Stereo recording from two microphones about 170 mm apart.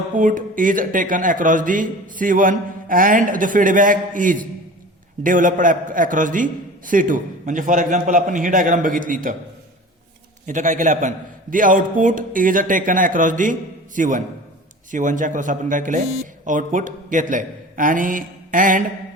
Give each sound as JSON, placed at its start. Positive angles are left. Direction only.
{"t": 0.1, "sound": "a man's voice", "side_deg": -50}
{"t": 10.4, "sound": "a man's voice", "side_deg": -45}